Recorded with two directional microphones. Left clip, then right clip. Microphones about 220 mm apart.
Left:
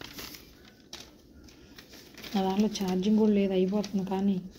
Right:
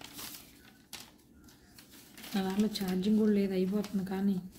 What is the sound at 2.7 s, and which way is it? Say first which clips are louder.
Speech: left 4 dB; 40° right (ahead or behind).